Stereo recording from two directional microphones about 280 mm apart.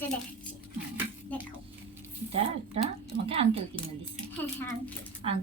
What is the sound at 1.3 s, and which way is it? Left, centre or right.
Speech, centre.